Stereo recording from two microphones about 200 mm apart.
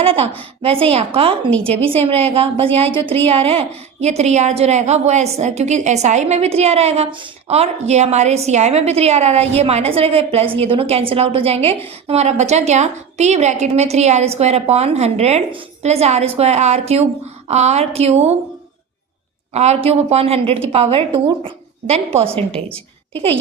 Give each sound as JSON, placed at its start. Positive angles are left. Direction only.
{"t": 0.0, "sound": "a woman's voice", "side_deg": -30}
{"t": 19.5, "sound": "a woman's voice", "side_deg": -30}
{"t": 22.5, "sound": "a woman's voice", "side_deg": 5}